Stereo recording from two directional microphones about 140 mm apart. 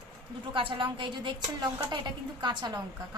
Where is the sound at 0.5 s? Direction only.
35° right (ahead or behind).